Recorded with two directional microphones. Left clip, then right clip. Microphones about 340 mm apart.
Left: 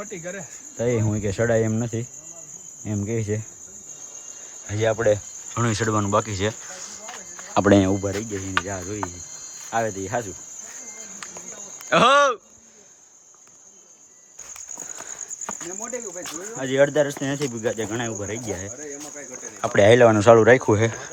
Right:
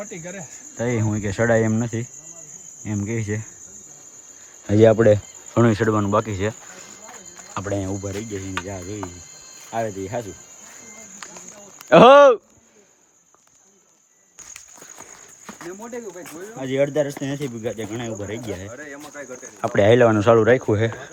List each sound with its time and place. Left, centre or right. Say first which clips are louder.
0.0 s speech: left 1 dB; centre
2.5 s cricket: right 1 dB; centre
4.7 s cricket: right 6 dB; centre
5.5 s speech: right 5 dB; centre
7.8 s speech: left 8 dB; left
8.2 s speech: left 3 dB; centre
11.9 s speech: right 7 dB; centre
16.2 s speech: left 2 dB; centre